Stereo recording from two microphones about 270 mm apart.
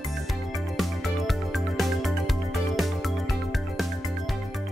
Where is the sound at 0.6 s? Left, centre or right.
Centre.